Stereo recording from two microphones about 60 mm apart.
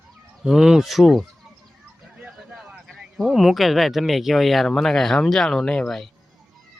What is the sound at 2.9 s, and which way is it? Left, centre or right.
Speech, centre.